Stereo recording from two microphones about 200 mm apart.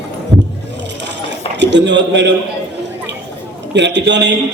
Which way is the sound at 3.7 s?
60° right (ahead or behind).